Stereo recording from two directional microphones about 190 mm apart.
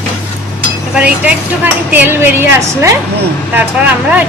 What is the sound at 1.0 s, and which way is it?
A woman's voice, 5° right (ahead or behind).